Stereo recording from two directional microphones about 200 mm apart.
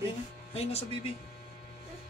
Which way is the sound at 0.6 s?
30° left (ahead or behind).